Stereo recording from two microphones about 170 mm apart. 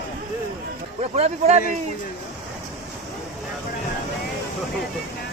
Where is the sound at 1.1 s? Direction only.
35° right (ahead or behind).